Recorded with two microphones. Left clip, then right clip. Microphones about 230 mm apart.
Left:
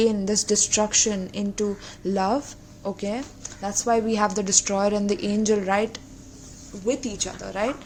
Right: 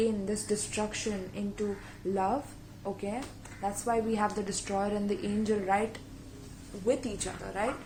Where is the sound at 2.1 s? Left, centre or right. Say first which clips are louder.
Left 7 dB; left.